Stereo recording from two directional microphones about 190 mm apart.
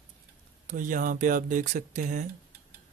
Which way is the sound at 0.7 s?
45° right (ahead or behind).